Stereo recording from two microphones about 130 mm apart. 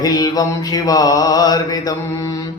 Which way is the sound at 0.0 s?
30° left (ahead or behind).